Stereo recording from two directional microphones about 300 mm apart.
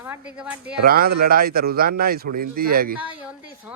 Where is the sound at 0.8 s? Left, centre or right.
Right.